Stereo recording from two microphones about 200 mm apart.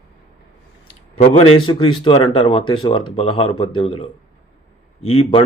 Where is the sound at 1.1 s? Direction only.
30° left (ahead or behind).